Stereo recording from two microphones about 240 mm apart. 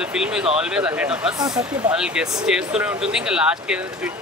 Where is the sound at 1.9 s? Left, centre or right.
Centre.